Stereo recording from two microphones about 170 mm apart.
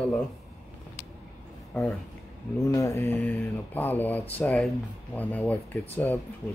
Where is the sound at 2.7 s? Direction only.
20° left (ahead or behind).